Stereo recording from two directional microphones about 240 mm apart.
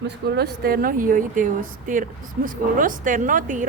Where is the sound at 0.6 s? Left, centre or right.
Right.